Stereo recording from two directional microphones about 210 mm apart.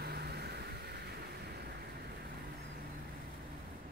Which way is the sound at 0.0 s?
50° right (ahead or behind).